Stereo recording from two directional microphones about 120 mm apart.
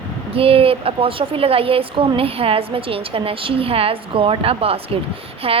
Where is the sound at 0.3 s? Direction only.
50° right (ahead or behind).